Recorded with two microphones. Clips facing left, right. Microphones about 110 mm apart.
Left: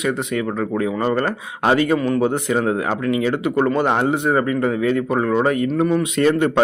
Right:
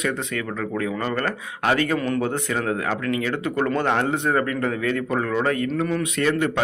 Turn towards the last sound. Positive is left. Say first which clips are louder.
# left 5 dB
turn(degrees=25)  # may be behind; listen again after turning